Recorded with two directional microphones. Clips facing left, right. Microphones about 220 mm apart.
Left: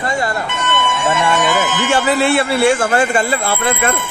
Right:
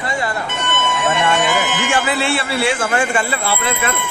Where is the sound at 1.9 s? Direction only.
40° left (ahead or behind).